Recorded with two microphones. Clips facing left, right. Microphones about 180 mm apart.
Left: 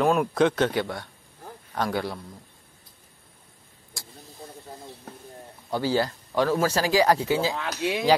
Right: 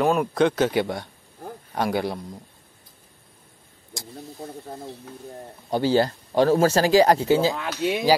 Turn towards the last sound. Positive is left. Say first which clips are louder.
# right 4 dB
turn(degrees=-35)  # may be behind; listen again after turning